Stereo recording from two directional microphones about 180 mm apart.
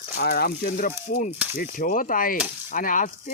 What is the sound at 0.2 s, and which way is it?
Speech, 55° left (ahead or behind).